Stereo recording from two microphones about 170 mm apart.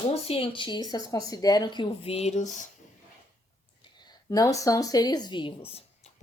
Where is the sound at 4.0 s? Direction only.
25° left (ahead or behind).